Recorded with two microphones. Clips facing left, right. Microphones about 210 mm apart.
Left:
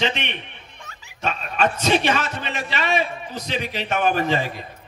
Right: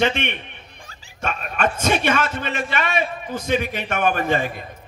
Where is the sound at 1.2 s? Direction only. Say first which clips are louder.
Left 1 dB; 50° right (ahead or behind).